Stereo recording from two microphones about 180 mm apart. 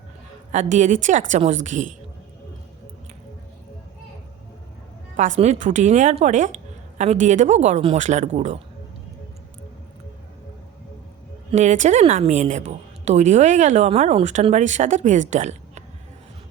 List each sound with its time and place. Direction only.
0.5 s a woman's voice: 40° right (ahead or behind)
5.4 s a woman's voice: 40° right (ahead or behind)
11.5 s a woman's voice: 40° right (ahead or behind)